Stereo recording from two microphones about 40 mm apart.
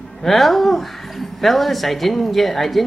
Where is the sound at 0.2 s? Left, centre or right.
Centre.